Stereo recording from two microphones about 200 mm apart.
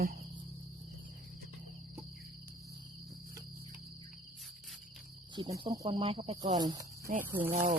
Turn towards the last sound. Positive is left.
turn(degrees=-50)  # may be behind; listen again after turning